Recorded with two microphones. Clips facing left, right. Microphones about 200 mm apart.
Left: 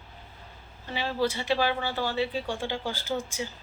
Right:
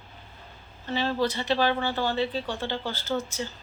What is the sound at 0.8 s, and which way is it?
Speech, 10° left (ahead or behind).